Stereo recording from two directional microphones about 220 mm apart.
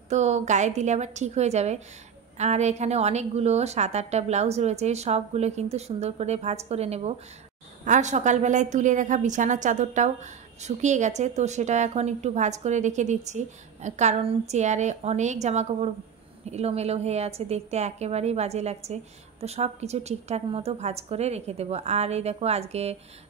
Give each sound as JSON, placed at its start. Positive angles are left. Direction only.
{"t": 0.1, "sound": "a woman's voice", "side_deg": -30}